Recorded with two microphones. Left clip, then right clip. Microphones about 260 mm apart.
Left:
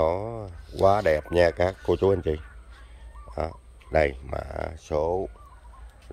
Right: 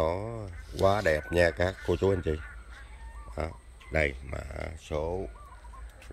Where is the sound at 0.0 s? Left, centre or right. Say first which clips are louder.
Left 5 dB; centre.